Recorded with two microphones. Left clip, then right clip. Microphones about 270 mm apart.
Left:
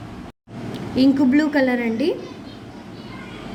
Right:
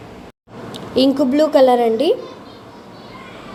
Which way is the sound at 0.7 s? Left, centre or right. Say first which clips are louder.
Right 3 dB; centre.